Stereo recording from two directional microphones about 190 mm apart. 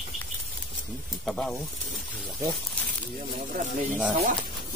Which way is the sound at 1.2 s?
5° left (ahead or behind).